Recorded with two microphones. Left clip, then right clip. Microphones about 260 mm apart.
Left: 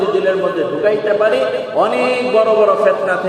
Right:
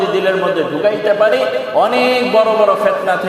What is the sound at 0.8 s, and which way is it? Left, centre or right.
A man's voice, right.